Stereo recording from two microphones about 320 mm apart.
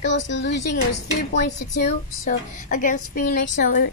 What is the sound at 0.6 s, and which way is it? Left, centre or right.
Speech, left.